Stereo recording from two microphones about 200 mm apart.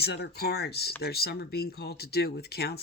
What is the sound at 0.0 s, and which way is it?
Speech, 55° left (ahead or behind).